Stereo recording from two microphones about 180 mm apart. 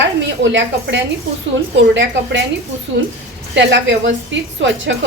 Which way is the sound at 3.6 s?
85° right.